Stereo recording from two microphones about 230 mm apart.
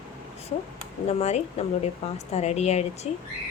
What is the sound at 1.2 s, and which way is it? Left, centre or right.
Speech, left.